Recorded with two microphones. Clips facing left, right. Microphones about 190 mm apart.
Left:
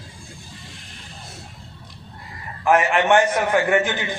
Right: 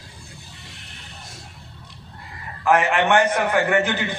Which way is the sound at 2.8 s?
60° right (ahead or behind).